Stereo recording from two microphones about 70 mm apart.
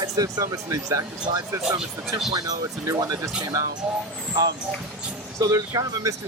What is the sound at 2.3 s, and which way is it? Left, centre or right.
Speech, right.